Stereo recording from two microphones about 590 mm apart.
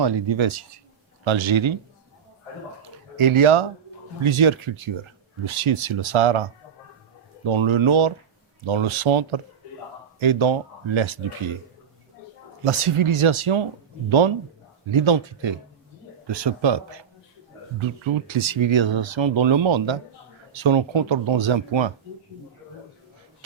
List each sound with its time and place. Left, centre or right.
0.0 s speech: right
3.2 s speech: right
12.6 s speech: right
18.3 s speech: right